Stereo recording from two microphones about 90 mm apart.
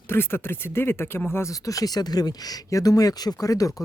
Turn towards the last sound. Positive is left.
turn(degrees=40)  # may be behind; listen again after turning